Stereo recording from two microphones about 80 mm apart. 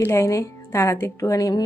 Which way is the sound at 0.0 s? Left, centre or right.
Left.